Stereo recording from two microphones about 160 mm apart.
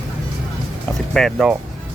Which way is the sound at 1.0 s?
Centre (ahead or behind).